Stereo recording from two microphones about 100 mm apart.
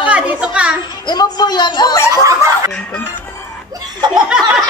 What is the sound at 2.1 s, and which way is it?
Speech, 35° right (ahead or behind).